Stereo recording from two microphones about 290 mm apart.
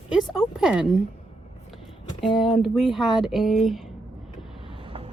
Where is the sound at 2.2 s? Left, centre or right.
Centre.